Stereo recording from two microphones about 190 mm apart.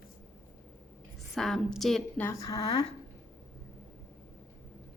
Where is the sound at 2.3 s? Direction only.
20° left (ahead or behind).